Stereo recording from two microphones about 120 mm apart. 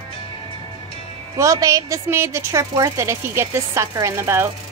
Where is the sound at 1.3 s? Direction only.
25° right (ahead or behind).